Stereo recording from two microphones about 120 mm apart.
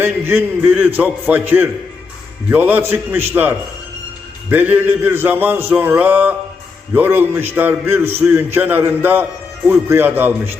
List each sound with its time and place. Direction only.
0.0 s a man's voice: 20° right (ahead or behind)